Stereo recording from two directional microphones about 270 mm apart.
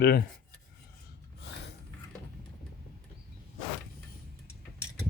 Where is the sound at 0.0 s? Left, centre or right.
Left.